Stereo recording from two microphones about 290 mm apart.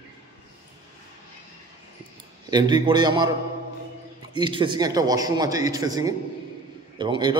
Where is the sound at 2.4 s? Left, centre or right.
Centre.